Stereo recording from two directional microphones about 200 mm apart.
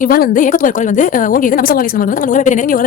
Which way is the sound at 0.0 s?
45° left (ahead or behind).